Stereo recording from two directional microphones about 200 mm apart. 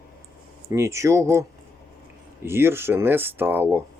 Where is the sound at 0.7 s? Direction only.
15° right (ahead or behind).